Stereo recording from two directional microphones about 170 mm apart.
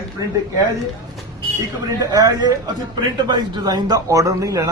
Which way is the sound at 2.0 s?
20° right (ahead or behind).